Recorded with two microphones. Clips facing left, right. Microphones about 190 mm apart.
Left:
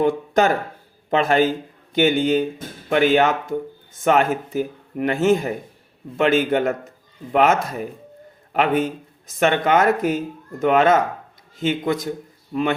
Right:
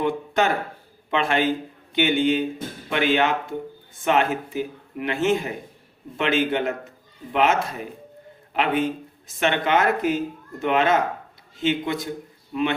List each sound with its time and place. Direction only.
0.0 s speech: 40° left (ahead or behind)